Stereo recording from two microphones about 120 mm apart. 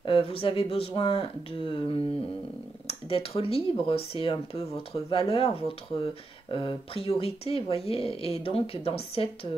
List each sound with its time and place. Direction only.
0.0 s speech: 50° left (ahead or behind)